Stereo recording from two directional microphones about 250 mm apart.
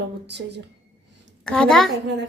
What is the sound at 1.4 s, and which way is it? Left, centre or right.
Speech, centre.